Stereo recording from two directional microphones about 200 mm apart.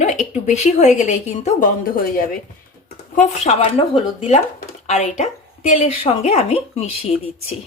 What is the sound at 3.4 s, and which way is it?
Speech, 30° left (ahead or behind).